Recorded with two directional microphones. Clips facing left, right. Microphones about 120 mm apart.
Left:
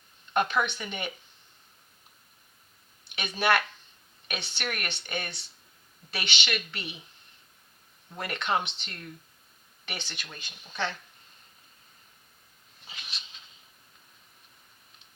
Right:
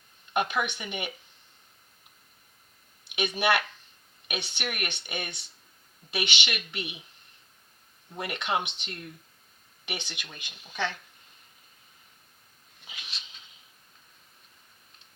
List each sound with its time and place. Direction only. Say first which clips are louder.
0.3 s speech: left 1 dB; 15° right (ahead or behind)
3.1 s speech: even; 15° right (ahead or behind)
8.1 s speech: left 1 dB; 15° right (ahead or behind)